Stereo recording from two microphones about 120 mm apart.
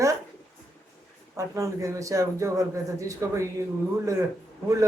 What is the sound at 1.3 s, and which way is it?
A man's voice, 25° right (ahead or behind).